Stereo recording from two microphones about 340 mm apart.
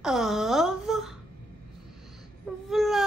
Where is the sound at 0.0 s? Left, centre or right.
Centre.